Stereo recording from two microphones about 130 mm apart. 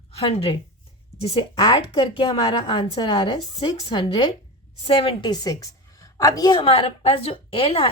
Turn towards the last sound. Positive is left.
turn(degrees=45)  # may be behind; listen again after turning